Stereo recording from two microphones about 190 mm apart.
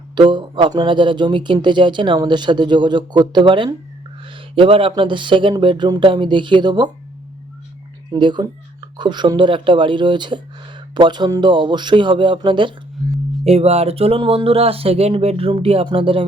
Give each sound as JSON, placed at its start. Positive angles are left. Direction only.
{"t": 0.2, "sound": "speech", "side_deg": -25}
{"t": 8.1, "sound": "speech", "side_deg": -25}